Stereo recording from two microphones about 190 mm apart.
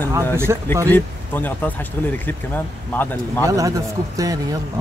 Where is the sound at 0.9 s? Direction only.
10° left (ahead or behind).